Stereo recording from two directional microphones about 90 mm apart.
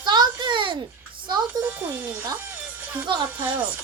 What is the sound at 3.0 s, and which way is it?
Speech, 60° right (ahead or behind).